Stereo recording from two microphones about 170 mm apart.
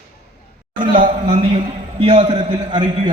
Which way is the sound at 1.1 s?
35° right (ahead or behind).